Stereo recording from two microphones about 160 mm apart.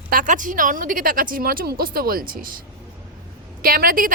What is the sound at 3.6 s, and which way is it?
Speech, 65° right (ahead or behind).